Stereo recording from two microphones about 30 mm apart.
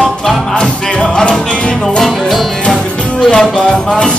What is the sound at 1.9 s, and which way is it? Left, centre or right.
Music, centre.